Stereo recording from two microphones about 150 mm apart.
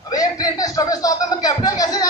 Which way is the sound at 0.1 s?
25° left (ahead or behind).